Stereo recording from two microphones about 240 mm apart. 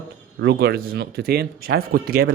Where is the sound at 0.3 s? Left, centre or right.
Right.